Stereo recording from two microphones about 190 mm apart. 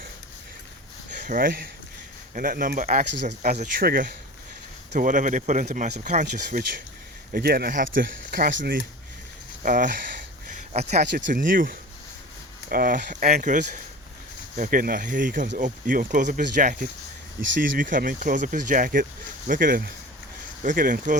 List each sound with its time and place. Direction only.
1.3 s speech: 45° right (ahead or behind)
7.3 s speech: 55° right (ahead or behind)